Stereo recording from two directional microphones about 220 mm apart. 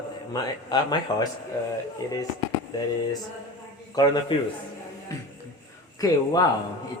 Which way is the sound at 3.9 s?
20° left (ahead or behind).